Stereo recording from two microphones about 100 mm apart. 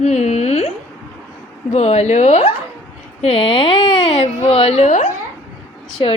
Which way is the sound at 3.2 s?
70° left (ahead or behind).